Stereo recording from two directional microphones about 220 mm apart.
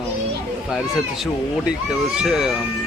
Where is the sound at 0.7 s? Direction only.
Centre (ahead or behind).